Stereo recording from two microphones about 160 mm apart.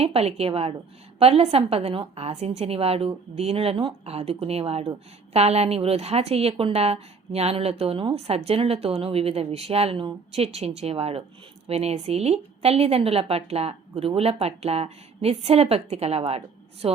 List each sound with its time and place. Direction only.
0.0 s a woman's voice: 40° right (ahead or behind)